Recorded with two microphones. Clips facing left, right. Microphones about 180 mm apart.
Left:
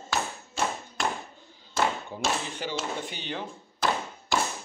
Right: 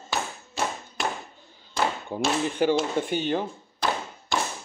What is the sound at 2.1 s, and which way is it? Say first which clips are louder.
Speech: right 5 dB; 50° right (ahead or behind).